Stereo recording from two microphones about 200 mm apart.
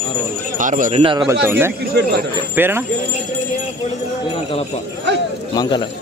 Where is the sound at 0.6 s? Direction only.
40° right (ahead or behind).